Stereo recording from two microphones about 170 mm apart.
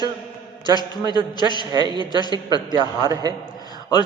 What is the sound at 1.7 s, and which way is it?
Speech, 25° right (ahead or behind).